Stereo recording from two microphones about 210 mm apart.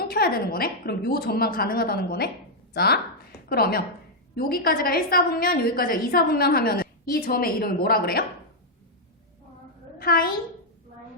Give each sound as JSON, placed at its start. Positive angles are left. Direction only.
{"t": 0.0, "sound": "a woman's voice", "side_deg": 45}
{"t": 10.0, "sound": "a woman's voice", "side_deg": 45}